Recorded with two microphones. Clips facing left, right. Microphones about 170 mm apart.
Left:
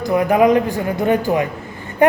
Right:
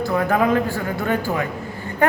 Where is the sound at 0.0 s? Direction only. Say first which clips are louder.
Left 5 dB; 15° left (ahead or behind).